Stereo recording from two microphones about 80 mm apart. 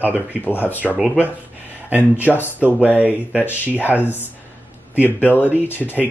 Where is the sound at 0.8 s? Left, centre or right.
Centre.